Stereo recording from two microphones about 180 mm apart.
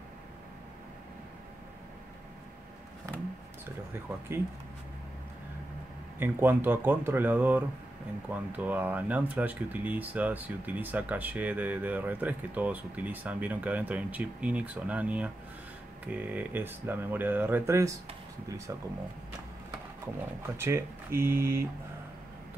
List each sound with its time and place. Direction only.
3.6 s speech: 15° right (ahead or behind)
6.1 s speech: 10° right (ahead or behind)
20.4 s speech: 15° right (ahead or behind)